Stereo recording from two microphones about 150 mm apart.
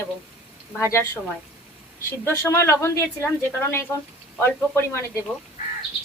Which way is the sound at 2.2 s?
15° left (ahead or behind).